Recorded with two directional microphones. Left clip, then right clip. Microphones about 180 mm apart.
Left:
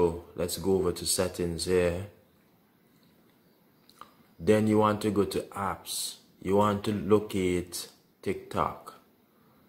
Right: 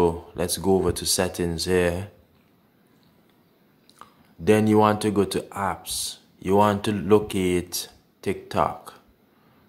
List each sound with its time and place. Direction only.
0.0 s speech: 20° right (ahead or behind)
4.0 s speech: 15° right (ahead or behind)